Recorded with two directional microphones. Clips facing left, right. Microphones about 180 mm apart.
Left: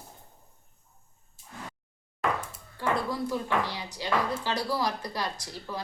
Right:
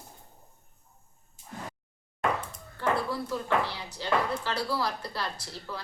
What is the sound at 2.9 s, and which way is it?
Speech, 15° left (ahead or behind).